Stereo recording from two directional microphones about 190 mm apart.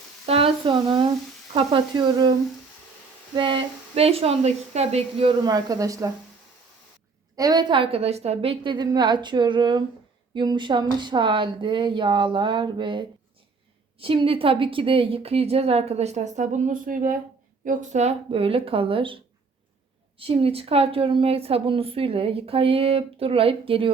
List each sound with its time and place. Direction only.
0.3 s a sound: 30° right (ahead or behind)
1.5 s a woman's voice: 25° right (ahead or behind)
3.3 s a woman's voice: 25° right (ahead or behind)
7.3 s a woman's voice: 20° right (ahead or behind)